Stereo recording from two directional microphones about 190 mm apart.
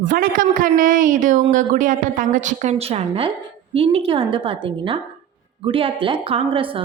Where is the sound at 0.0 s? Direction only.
45° right (ahead or behind).